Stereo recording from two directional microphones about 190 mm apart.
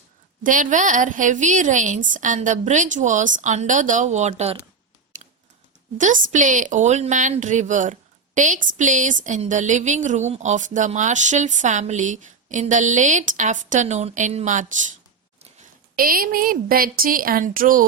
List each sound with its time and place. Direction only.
0.4 s a woman's voice: 40° right (ahead or behind)
6.0 s a woman's voice: 40° right (ahead or behind)
16.0 s a woman's voice: 50° right (ahead or behind)